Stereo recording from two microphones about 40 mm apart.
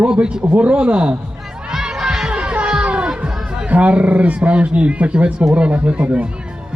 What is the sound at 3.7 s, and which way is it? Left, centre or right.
Speech, right.